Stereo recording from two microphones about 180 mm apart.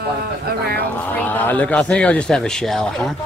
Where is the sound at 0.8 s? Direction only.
10° left (ahead or behind).